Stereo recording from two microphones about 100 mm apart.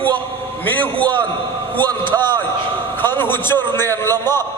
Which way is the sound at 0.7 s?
15° left (ahead or behind).